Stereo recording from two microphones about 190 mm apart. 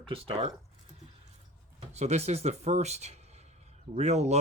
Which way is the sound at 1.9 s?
35° right (ahead or behind).